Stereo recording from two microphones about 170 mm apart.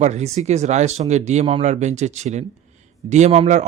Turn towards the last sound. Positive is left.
turn(degrees=-40)  # may be behind; listen again after turning